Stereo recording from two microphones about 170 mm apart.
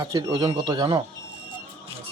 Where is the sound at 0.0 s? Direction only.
20° right (ahead or behind).